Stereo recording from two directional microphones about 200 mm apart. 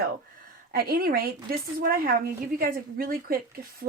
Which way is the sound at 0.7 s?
50° right (ahead or behind).